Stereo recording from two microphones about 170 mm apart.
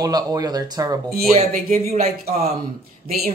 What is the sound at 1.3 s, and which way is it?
Speech, 40° right (ahead or behind).